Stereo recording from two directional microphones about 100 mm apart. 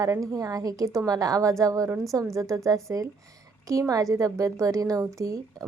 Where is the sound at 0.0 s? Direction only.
35° right (ahead or behind).